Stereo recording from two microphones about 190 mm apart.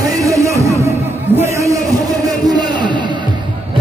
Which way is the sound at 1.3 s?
15° right (ahead or behind).